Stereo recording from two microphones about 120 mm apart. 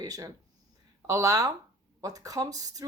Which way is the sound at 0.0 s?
30° right (ahead or behind).